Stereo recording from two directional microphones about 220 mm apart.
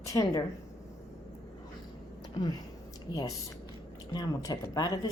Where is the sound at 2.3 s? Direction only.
20° left (ahead or behind).